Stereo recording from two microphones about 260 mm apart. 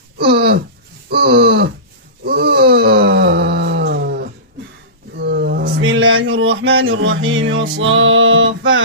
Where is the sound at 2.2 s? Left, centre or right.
Right.